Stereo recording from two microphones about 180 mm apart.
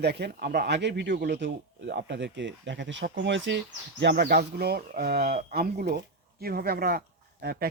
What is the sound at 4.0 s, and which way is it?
Speech, 70° right (ahead or behind).